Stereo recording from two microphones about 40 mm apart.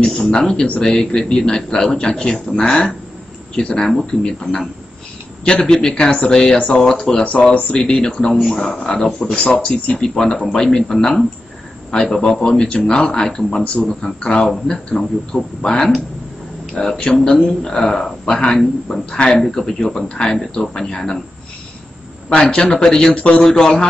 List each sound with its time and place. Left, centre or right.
0.0 s speech: centre
6.0 s speech: left
6.3 s speech: centre
6.6 s speech: left
6.9 s speech: centre
7.2 s speech: left
7.8 s speech: centre
17.1 s speech: left
22.3 s speech: left
23.1 s speech: left
23.4 s speech: centre